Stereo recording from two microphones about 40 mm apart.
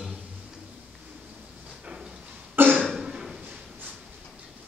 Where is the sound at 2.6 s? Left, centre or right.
Right.